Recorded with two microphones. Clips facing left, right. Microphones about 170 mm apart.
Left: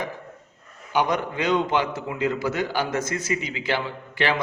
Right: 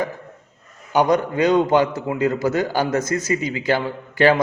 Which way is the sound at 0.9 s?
40° right (ahead or behind).